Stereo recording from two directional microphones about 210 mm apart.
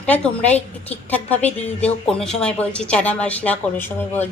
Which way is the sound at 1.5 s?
30° left (ahead or behind).